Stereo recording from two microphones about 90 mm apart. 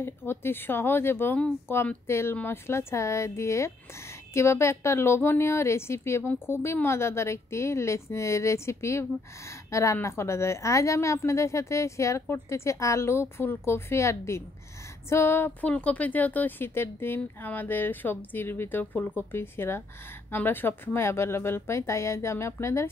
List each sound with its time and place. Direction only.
0.0 s a woman's voice: 25° left (ahead or behind)